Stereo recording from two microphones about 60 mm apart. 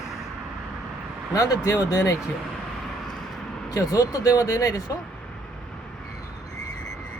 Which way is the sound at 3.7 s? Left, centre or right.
Left.